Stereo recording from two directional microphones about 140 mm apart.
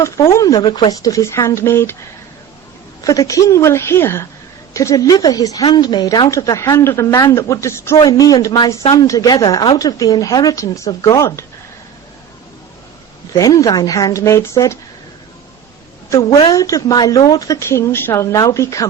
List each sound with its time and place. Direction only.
0.0 s speech: 20° left (ahead or behind)
3.0 s speech: 25° left (ahead or behind)
13.3 s speech: 25° left (ahead or behind)
16.5 s speech: 25° left (ahead or behind)